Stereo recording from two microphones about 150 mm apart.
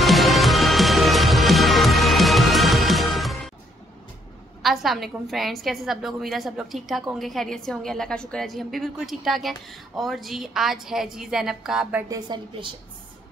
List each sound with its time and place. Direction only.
0.0 s music: centre (ahead or behind)
4.6 s a woman's voice: centre (ahead or behind)
12.1 s a woman's voice: 30° right (ahead or behind)